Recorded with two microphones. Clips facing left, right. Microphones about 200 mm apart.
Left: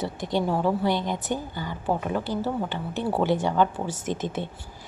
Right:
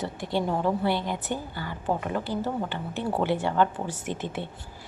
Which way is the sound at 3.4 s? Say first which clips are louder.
Left 1 dB; 15° left (ahead or behind).